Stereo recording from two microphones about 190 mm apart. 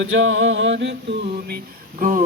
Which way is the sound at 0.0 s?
90° right.